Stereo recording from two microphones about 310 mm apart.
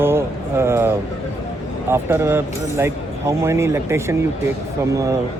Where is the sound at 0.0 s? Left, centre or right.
Centre.